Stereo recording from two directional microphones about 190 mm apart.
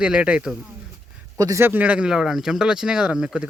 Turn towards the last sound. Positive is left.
turn(degrees=-5)  # may be behind; listen again after turning